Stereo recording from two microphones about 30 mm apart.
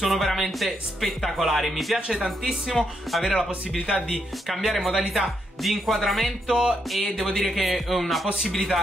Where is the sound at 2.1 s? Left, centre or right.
Centre.